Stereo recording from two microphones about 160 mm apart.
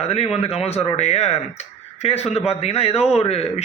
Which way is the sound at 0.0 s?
40° left (ahead or behind).